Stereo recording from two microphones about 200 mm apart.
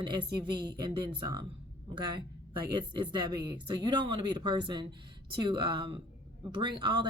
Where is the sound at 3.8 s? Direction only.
20° right (ahead or behind).